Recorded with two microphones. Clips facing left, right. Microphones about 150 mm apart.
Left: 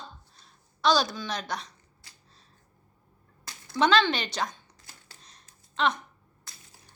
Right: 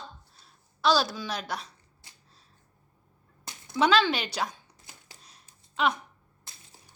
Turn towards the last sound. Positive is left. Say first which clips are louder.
# even
turn(degrees=-10)  # may be behind; listen again after turning